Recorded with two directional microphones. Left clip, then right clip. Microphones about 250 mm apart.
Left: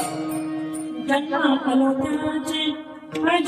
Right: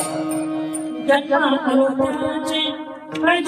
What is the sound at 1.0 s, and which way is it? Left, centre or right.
Music, centre.